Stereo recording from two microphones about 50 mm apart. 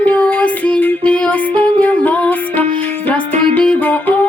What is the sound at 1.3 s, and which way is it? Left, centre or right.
Music, left.